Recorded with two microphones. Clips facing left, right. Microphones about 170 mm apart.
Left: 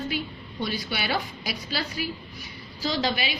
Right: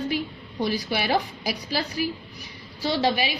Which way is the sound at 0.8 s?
35° right (ahead or behind).